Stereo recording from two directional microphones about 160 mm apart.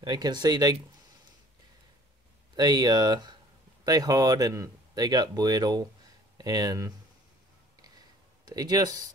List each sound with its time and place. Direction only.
0.0 s speech: 25° right (ahead or behind)
2.5 s speech: 25° right (ahead or behind)
8.5 s speech: 25° right (ahead or behind)